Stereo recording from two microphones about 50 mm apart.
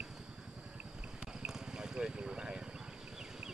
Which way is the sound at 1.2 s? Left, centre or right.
Centre.